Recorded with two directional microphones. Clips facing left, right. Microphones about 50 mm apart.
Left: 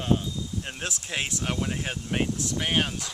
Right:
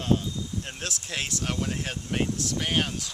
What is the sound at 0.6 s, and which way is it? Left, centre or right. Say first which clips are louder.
Speech: left 1 dB; centre.